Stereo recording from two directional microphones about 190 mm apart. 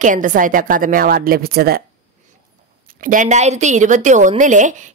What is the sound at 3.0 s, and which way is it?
A woman's voice, 40° right (ahead or behind).